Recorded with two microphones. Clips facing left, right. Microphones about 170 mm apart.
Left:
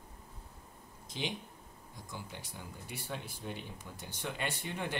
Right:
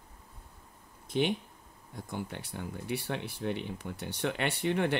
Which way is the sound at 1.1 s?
60° right (ahead or behind).